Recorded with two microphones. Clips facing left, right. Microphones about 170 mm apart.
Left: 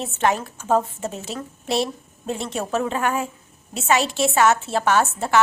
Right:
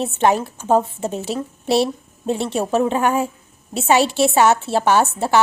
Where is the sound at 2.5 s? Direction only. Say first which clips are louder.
Right 5 dB; 30° right (ahead or behind).